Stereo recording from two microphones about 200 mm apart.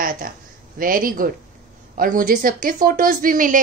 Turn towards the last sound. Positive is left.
turn(degrees=-40)  # may be behind; listen again after turning